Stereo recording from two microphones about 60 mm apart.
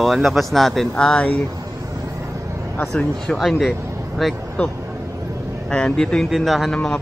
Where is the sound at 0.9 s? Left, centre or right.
Centre.